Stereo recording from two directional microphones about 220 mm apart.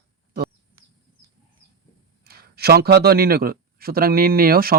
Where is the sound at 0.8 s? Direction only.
15° right (ahead or behind).